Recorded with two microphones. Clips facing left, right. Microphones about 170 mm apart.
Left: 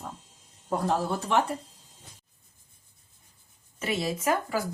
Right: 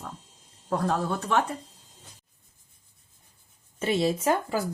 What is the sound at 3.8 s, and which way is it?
Speech, 30° right (ahead or behind).